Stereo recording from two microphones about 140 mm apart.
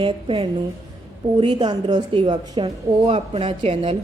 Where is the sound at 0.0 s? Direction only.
40° right (ahead or behind).